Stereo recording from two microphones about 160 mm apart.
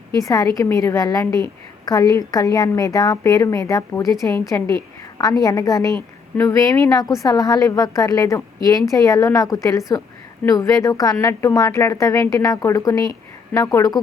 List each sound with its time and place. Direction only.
0.2 s a woman's voice: 20° left (ahead or behind)